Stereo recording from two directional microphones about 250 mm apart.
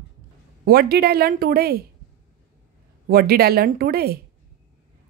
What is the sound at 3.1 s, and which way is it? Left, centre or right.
A woman's voice, right.